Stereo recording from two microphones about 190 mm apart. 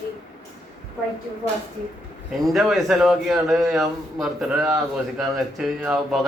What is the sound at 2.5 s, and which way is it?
A man's voice, centre (ahead or behind).